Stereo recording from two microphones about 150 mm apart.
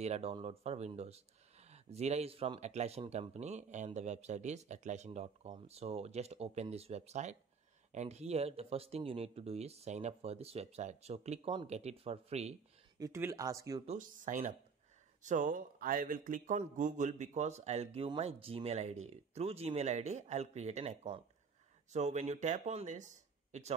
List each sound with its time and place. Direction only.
0.0 s speech: 45° right (ahead or behind)
13.0 s speech: 20° right (ahead or behind)
13.8 s speech: 60° right (ahead or behind)